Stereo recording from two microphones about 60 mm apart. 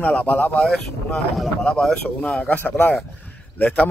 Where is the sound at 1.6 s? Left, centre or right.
Centre.